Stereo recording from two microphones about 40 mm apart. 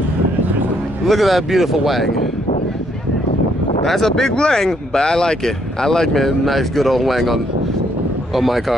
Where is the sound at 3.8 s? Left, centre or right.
Centre.